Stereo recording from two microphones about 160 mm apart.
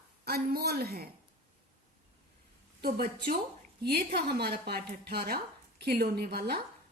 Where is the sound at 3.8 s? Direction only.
75° right (ahead or behind).